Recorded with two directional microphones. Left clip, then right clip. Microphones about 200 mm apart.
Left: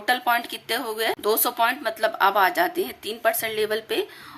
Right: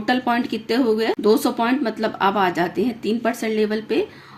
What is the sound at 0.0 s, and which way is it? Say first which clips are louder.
A woman's voice: right 1 dB; 25° left (ahead or behind).